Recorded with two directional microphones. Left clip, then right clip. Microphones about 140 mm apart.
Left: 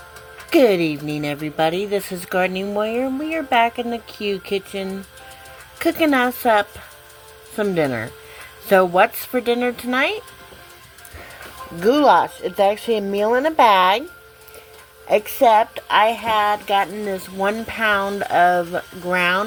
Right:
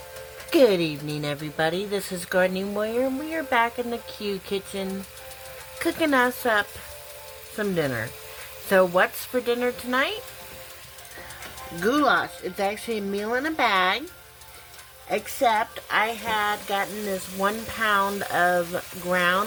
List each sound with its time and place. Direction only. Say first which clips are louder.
0.5 s speech: left 4 dB; 15° left (ahead or behind)
11.9 s speech: left 8 dB; 25° left (ahead or behind)
15.1 s speech: left 8 dB; 25° left (ahead or behind)